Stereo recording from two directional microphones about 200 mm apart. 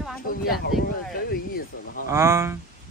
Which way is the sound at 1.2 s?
50° left (ahead or behind).